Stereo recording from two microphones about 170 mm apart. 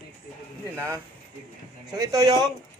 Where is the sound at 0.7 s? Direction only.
15° right (ahead or behind).